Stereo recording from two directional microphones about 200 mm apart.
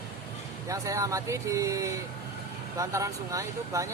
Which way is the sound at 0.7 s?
15° right (ahead or behind).